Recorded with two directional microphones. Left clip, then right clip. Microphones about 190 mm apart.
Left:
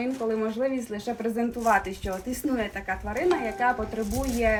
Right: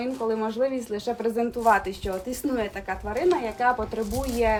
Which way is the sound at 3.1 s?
15° right (ahead or behind).